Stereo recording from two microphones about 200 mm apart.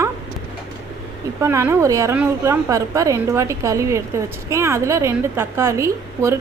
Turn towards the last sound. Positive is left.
turn(degrees=-15)  # may be behind; listen again after turning